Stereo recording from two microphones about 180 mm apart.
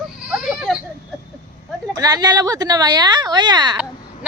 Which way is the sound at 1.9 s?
20° right (ahead or behind).